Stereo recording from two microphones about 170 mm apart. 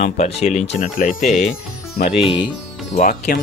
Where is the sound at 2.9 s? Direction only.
50° left (ahead or behind).